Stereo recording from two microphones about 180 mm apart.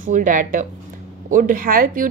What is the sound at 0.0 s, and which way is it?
A woman's voice, 45° right (ahead or behind).